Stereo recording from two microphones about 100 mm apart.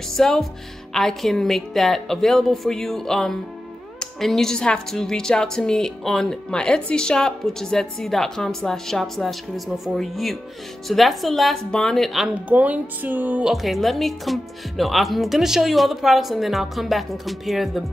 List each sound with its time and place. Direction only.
0.1 s a woman's voice: 5° left (ahead or behind)
12.4 s speech: 15° right (ahead or behind)
13.5 s a woman's voice: centre (ahead or behind)